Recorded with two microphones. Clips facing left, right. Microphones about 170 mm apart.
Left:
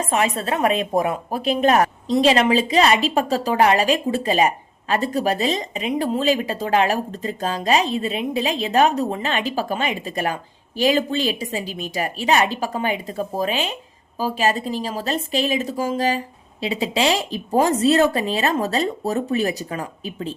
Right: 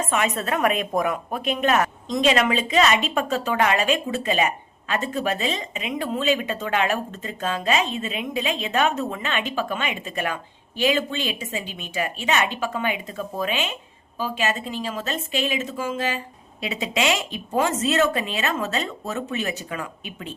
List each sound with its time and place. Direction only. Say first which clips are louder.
0.0 s speech: left 3 dB; 35° left (ahead or behind)